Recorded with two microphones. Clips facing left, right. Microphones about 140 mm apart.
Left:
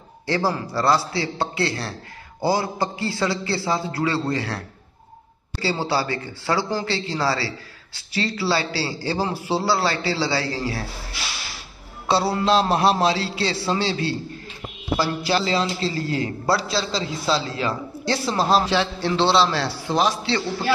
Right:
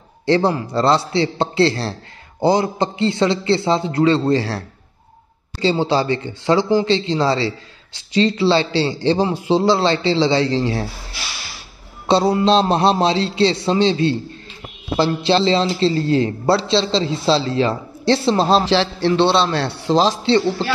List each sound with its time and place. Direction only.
0.3 s a man's voice: 25° right (ahead or behind)
12.1 s a man's voice: 25° right (ahead or behind)